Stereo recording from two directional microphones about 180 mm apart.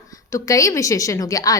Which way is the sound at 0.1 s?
15° left (ahead or behind).